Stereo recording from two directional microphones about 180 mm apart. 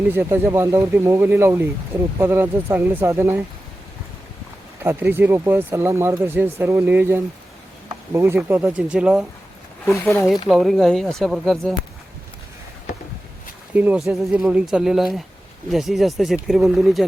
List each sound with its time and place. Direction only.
0.1 s speech: 10° right (ahead or behind)
4.8 s speech: 10° right (ahead or behind)
9.8 s speech: 15° left (ahead or behind)
10.5 s speech: centre (ahead or behind)
13.7 s speech: 5° right (ahead or behind)